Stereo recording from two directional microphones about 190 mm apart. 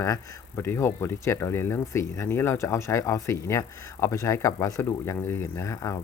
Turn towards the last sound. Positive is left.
turn(degrees=15)  # may be behind; listen again after turning